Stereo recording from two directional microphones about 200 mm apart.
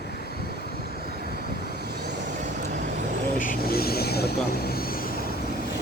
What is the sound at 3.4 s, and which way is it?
Vehicle, 45° left (ahead or behind).